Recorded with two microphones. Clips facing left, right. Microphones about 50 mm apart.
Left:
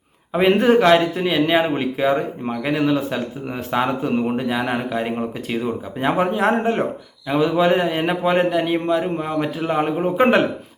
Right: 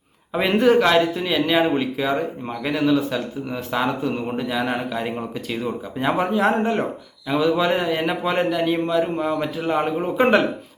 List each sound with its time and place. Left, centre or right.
0.3 s speech: left